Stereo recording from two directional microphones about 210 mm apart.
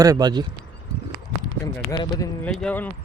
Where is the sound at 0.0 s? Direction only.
20° right (ahead or behind).